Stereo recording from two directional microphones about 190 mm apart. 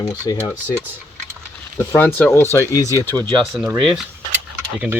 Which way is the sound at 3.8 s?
Centre (ahead or behind).